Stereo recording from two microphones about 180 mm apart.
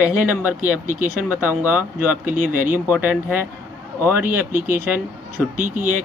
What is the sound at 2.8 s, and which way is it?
Speech, 10° right (ahead or behind).